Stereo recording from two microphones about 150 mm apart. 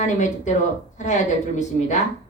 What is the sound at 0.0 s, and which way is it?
A woman's voice, 55° left (ahead or behind).